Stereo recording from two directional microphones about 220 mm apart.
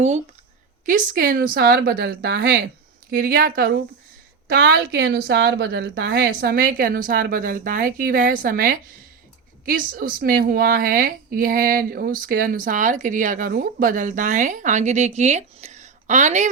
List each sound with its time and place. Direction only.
0.9 s a woman's voice: 40° right (ahead or behind)